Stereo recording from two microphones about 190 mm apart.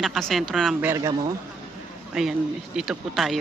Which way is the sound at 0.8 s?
15° right (ahead or behind).